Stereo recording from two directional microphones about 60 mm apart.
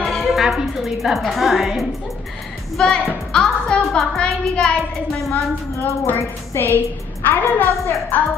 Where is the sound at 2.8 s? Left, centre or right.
Centre.